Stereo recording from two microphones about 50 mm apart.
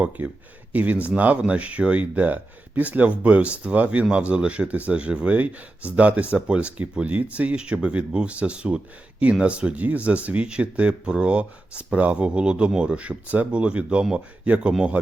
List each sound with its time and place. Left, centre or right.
0.2 s speech: right
7.5 s speech: right